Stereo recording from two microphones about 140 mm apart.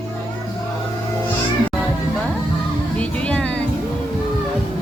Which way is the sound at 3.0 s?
10° left (ahead or behind).